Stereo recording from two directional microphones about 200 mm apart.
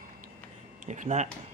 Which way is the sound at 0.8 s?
40° right (ahead or behind).